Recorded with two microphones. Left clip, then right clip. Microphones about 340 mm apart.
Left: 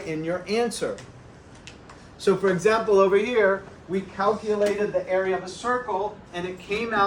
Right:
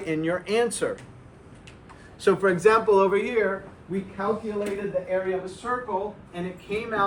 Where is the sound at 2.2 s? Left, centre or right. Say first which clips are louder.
Right 1 dB; centre.